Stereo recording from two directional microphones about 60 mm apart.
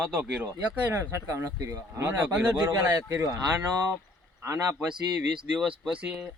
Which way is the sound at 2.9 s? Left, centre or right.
Right.